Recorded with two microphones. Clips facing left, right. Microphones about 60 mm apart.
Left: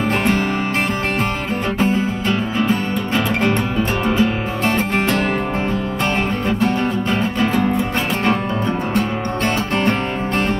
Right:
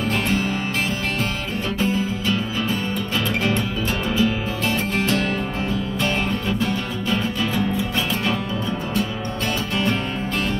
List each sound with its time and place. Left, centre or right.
1.8 s music: left
4.2 s music: left
6.6 s music: left